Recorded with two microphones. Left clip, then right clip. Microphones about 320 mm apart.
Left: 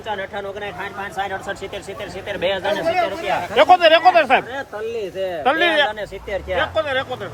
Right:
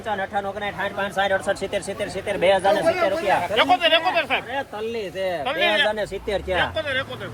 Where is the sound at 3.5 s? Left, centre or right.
Left.